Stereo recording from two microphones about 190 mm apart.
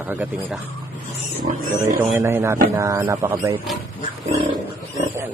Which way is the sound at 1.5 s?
35° right (ahead or behind).